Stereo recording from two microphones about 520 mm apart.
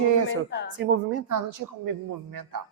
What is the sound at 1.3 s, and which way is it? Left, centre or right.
Speech, right.